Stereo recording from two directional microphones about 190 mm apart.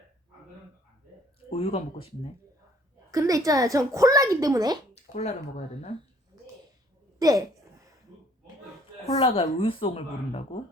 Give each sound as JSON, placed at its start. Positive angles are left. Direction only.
{"t": 1.5, "sound": "speech", "side_deg": 30}
{"t": 3.1, "sound": "a child's voice", "side_deg": -15}
{"t": 5.1, "sound": "speech", "side_deg": 35}
{"t": 7.2, "sound": "a sound", "side_deg": -20}
{"t": 9.1, "sound": "a woman's voice", "side_deg": 30}